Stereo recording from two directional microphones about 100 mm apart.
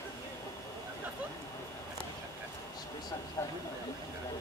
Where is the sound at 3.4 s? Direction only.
30° left (ahead or behind).